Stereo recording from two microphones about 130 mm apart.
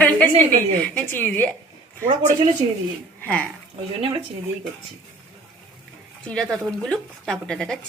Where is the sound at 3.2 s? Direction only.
10° left (ahead or behind).